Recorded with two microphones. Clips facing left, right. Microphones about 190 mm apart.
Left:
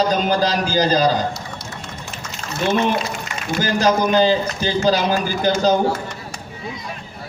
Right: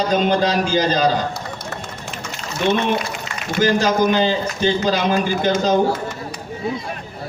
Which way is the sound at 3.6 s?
35° left (ahead or behind).